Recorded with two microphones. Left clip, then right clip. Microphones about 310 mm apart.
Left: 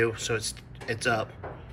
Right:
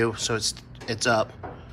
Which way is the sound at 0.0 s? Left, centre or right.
Centre.